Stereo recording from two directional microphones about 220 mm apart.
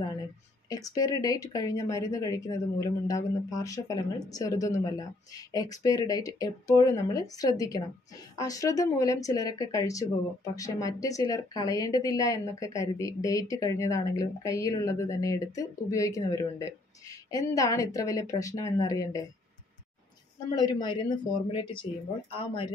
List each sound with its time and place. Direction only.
0.7 s speech: 15° left (ahead or behind)
20.5 s speech: 20° left (ahead or behind)